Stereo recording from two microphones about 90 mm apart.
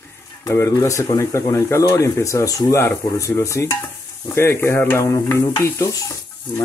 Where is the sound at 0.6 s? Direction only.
40° left (ahead or behind).